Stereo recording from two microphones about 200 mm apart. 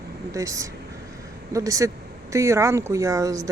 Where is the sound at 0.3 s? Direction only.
15° right (ahead or behind).